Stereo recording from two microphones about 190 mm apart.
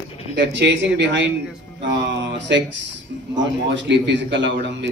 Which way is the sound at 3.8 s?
65° right (ahead or behind).